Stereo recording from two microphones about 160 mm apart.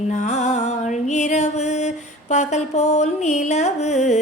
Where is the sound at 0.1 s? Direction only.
45° left (ahead or behind).